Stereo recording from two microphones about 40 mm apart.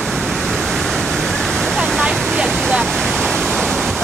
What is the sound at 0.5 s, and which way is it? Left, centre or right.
Waterfall, centre.